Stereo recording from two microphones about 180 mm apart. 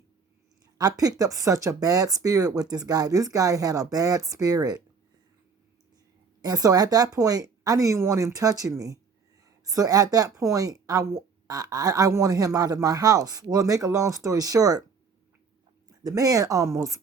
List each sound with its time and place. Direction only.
0.8 s speech: 20° right (ahead or behind)
6.4 s speech: 20° right (ahead or behind)
15.9 s speech: 20° right (ahead or behind)